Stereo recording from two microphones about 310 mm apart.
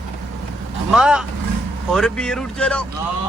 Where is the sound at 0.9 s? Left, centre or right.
Centre.